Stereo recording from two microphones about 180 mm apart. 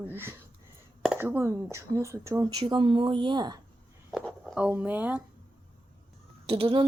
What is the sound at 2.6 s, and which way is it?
Speech, 30° right (ahead or behind).